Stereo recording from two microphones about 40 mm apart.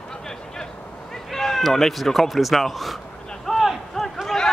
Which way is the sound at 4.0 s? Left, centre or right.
Centre.